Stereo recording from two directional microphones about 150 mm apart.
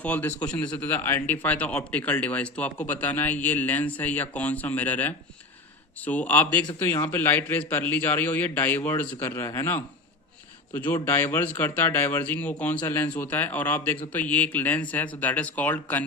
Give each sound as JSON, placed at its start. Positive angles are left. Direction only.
{"t": 0.0, "sound": "a man's voice", "side_deg": 10}